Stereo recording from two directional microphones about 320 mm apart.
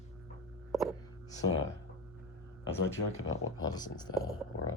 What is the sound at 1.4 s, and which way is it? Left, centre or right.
Speech, left.